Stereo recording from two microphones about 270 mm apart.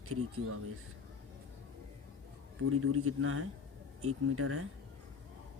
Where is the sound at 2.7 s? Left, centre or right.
Right.